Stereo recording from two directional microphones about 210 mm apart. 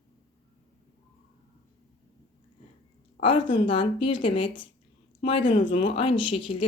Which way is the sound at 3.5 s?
25° left (ahead or behind).